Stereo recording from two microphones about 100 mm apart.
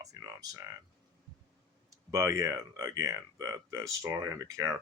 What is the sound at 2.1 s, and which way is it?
Speech, 30° right (ahead or behind).